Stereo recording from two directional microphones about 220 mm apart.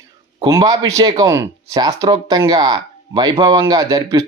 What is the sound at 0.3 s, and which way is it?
Speech, 15° right (ahead or behind).